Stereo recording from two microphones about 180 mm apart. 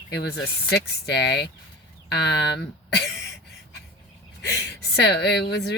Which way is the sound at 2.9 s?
65° left (ahead or behind).